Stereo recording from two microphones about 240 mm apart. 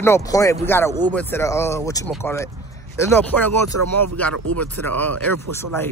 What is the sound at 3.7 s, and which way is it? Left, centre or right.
Speech, right.